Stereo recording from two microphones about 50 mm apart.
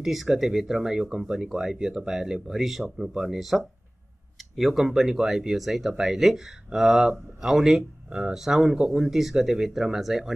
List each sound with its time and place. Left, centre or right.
0.0 s speech: centre
9.0 s speech: centre